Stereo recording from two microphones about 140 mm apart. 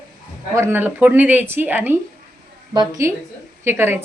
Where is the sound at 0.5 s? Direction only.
15° right (ahead or behind).